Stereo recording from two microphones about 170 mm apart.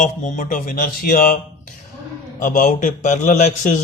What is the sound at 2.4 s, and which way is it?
Speech, 50° left (ahead or behind).